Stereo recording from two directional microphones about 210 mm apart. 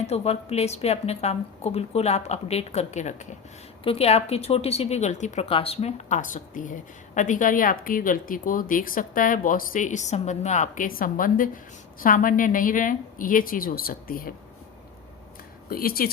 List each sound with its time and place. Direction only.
0.1 s speech: 30° left (ahead or behind)
15.7 s speech: 45° left (ahead or behind)